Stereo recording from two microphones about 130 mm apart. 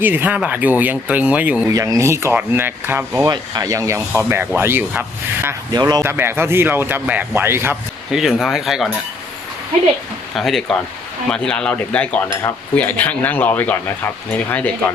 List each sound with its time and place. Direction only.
0.0 s speech: 15° right (ahead or behind)
1.7 s speech: 25° right (ahead or behind)
3.2 s speech: 30° right (ahead or behind)
5.7 s speech: 30° right (ahead or behind)
8.1 s speech: 5° right (ahead or behind)
10.3 s speech: centre (ahead or behind)
11.3 s cutlery: 5° left (ahead or behind)